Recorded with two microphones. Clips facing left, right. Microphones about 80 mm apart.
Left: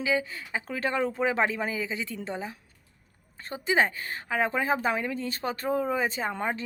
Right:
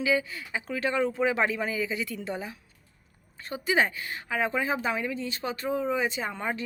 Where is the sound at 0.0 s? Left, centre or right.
Left.